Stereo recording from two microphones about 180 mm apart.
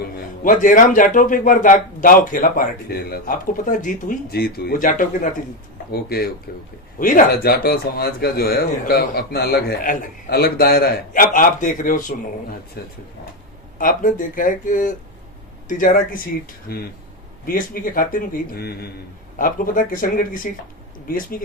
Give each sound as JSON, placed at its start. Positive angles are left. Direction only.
{"t": 0.0, "sound": "a man's voice", "side_deg": 45}
{"t": 12.8, "sound": "speech", "side_deg": 60}
{"t": 13.7, "sound": "a man's voice", "side_deg": 50}
{"t": 17.4, "sound": "a man's voice", "side_deg": 50}
{"t": 19.4, "sound": "a man's voice", "side_deg": 50}